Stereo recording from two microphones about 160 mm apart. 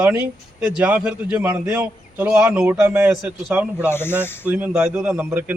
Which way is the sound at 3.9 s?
15° left (ahead or behind).